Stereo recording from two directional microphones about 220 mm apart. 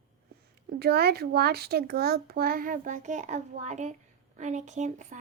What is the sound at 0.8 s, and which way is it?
A woman's voice, 45° right (ahead or behind).